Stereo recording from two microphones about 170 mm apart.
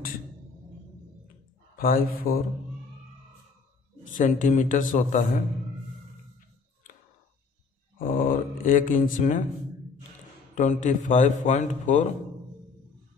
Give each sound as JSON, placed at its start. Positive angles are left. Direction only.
{"t": 1.8, "sound": "speech", "side_deg": 55}
{"t": 4.1, "sound": "a man's voice", "side_deg": 50}
{"t": 8.0, "sound": "a sound", "side_deg": 55}
{"t": 10.5, "sound": "a man's voice", "side_deg": 45}